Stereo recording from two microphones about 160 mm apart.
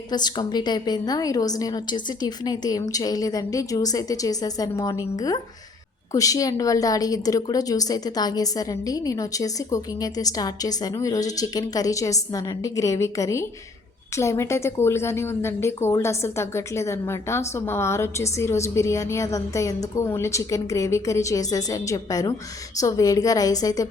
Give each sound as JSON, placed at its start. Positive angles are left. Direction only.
{"t": 0.1, "sound": "a woman's voice", "side_deg": 25}